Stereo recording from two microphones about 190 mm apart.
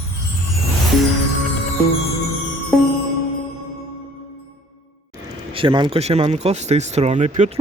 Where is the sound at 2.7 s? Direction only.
Centre (ahead or behind).